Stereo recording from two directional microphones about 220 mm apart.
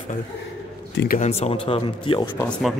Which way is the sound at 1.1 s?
30° left (ahead or behind).